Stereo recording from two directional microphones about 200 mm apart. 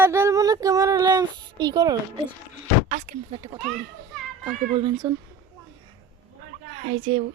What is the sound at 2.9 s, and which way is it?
Speech, 50° right (ahead or behind).